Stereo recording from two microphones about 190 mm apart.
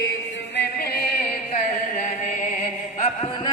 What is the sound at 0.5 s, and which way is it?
Singing, 55° left (ahead or behind).